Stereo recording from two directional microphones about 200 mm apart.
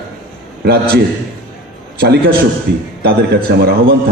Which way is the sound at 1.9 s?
50° right (ahead or behind).